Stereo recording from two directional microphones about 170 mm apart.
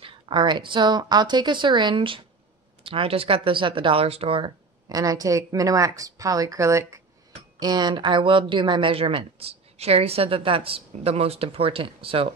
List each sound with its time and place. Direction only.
0.0 s speech: 30° right (ahead or behind)